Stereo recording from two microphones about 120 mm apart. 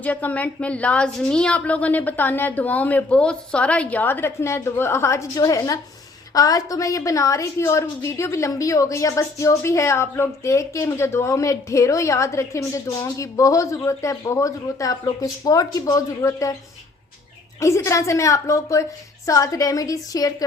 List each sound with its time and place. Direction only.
0.0 s a woman's voice: 15° left (ahead or behind)
17.6 s a woman's voice: 25° left (ahead or behind)